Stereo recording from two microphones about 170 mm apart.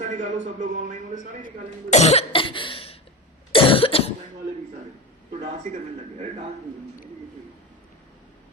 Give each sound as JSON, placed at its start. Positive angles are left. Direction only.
{"t": 0.0, "sound": "a man's voice", "side_deg": -45}
{"t": 1.9, "sound": "cough", "side_deg": 40}
{"t": 5.3, "sound": "a man's voice", "side_deg": -45}